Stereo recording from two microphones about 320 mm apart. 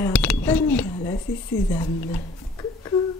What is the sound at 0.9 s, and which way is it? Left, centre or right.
Speech, centre.